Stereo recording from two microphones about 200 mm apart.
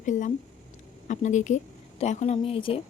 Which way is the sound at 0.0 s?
40° left (ahead or behind).